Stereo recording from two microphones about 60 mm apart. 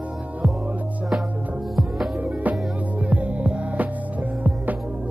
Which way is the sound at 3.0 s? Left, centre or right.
Right.